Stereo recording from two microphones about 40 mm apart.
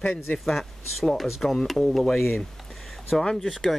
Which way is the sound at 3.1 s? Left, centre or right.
Centre.